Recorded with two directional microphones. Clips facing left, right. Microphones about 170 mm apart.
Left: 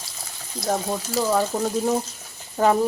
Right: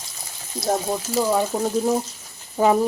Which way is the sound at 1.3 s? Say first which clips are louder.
Even; 10° right (ahead or behind).